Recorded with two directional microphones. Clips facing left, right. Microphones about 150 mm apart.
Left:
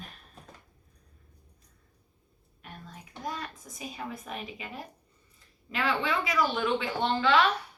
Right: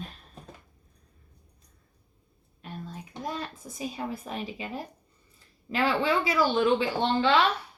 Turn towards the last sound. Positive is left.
turn(degrees=-30)  # may be behind; listen again after turning